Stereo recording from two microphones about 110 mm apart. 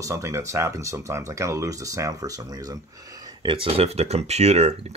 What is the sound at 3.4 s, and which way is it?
Speech, 50° right (ahead or behind).